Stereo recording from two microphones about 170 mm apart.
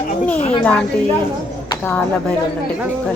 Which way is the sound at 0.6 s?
10° left (ahead or behind).